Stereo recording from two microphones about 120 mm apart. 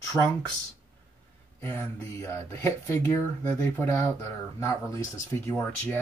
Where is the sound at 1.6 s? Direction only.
15° left (ahead or behind).